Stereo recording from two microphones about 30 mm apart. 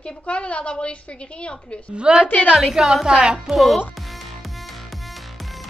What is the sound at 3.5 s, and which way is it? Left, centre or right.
Speech, centre.